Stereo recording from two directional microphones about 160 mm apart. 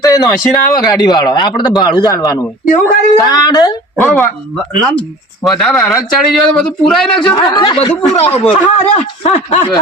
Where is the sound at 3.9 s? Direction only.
15° left (ahead or behind).